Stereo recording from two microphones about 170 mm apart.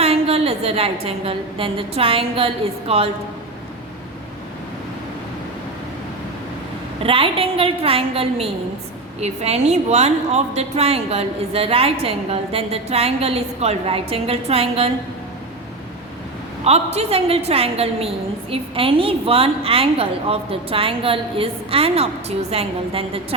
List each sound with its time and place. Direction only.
0.0 s a woman's voice: 35° right (ahead or behind)
7.0 s a woman's voice: 35° right (ahead or behind)
16.6 s a woman's voice: 40° right (ahead or behind)